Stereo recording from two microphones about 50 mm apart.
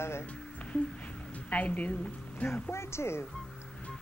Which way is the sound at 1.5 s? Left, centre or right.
Left.